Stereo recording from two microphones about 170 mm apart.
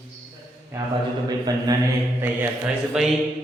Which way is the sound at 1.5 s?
25° right (ahead or behind).